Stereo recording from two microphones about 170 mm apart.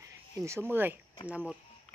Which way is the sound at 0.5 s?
10° right (ahead or behind).